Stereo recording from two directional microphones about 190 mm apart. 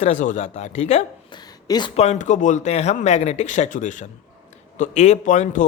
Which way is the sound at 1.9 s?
35° left (ahead or behind).